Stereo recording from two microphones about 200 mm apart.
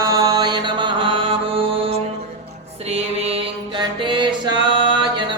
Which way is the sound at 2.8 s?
30° right (ahead or behind).